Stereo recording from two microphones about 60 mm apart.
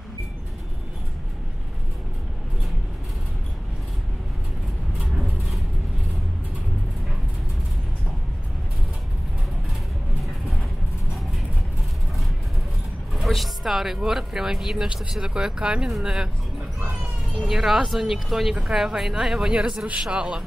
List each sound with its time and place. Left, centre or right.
5.0 s music: centre
13.1 s speech: centre
17.5 s speech: centre
19.9 s speech: centre